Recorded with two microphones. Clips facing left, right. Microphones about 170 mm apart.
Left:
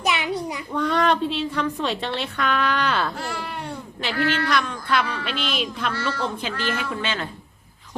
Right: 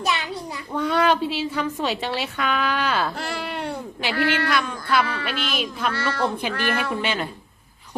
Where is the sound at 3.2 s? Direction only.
70° right (ahead or behind).